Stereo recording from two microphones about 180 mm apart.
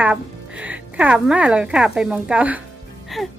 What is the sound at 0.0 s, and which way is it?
Speech, 10° right (ahead or behind).